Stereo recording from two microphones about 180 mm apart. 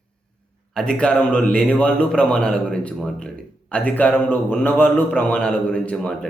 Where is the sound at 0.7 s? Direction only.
5° left (ahead or behind).